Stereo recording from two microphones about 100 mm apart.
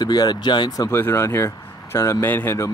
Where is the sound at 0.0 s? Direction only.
45° left (ahead or behind).